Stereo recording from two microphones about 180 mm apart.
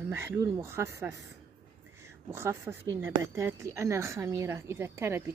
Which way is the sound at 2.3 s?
15° right (ahead or behind).